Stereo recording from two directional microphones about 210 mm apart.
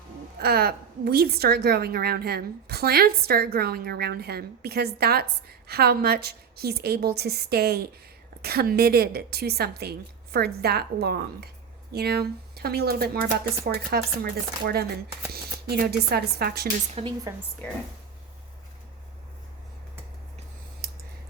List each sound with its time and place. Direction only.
0.3 s a woman's voice: 45° right (ahead or behind)
16.9 s a woman's voice: 25° right (ahead or behind)
17.6 s speech: 5° left (ahead or behind)